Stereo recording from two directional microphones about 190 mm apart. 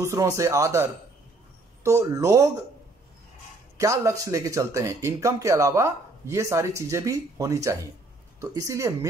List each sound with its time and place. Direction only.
0.0 s speech: 15° right (ahead or behind)
3.8 s speech: 15° right (ahead or behind)